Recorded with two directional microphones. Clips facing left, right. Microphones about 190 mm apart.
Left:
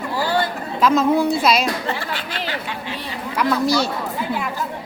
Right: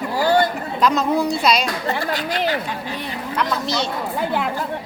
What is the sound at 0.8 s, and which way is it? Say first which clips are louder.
Speech: left 2 dB; centre (ahead or behind).